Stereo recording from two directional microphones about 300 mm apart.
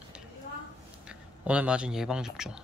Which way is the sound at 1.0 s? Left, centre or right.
Centre.